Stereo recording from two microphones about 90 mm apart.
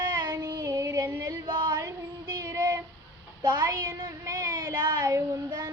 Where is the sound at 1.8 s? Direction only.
40° right (ahead or behind).